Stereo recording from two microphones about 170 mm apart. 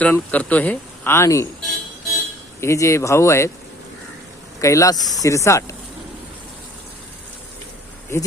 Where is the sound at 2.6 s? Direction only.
15° left (ahead or behind).